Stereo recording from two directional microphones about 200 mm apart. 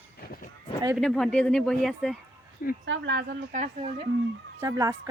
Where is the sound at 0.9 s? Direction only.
Centre (ahead or behind).